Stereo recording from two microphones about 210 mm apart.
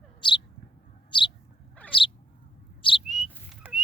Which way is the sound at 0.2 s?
20° left (ahead or behind).